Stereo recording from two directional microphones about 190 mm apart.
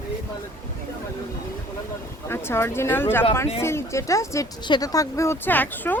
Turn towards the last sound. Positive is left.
turn(degrees=10)  # may be behind; listen again after turning